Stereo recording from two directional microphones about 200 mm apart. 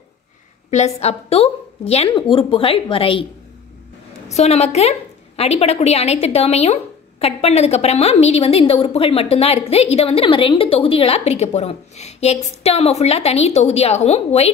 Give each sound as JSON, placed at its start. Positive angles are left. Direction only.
{"t": 0.7, "sound": "a woman's voice", "side_deg": 35}
{"t": 4.3, "sound": "a woman's voice", "side_deg": 35}